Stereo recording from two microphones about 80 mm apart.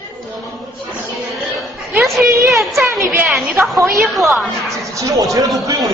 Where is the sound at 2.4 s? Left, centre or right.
Right.